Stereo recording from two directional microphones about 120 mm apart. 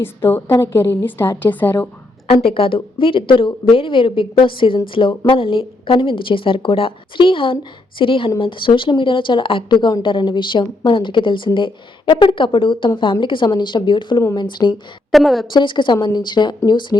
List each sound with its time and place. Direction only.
0.0 s a woman's voice: 20° left (ahead or behind)
2.3 s a woman's voice: 50° left (ahead or behind)
15.1 s a woman's voice: centre (ahead or behind)
15.4 s speech: 40° left (ahead or behind)